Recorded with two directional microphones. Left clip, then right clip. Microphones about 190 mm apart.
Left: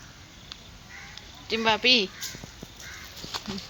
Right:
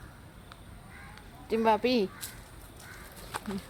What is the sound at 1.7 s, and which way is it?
Speech, 15° right (ahead or behind).